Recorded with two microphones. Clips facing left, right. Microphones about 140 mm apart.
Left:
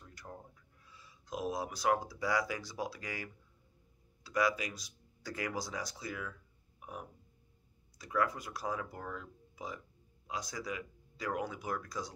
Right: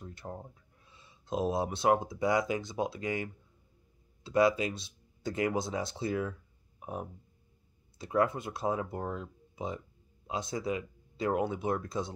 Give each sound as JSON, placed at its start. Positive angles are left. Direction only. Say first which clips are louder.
{"t": 0.0, "sound": "speech", "louder": "right 7 dB", "side_deg": -25}
{"t": 6.8, "sound": "music", "louder": "right 7 dB", "side_deg": -30}
{"t": 8.0, "sound": "speech", "louder": "right 5 dB", "side_deg": -25}